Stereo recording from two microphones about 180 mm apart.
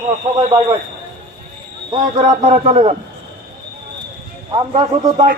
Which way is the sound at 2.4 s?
35° right (ahead or behind).